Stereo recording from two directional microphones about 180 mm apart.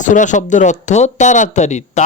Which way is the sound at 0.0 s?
45° left (ahead or behind).